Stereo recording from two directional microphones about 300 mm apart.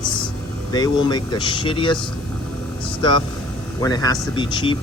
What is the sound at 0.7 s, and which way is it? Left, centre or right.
Speech, centre.